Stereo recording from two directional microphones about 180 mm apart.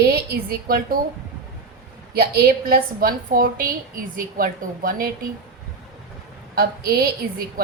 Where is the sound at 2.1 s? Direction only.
60° right (ahead or behind).